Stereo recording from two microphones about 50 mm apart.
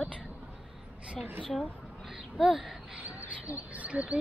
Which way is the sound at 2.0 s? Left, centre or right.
Centre.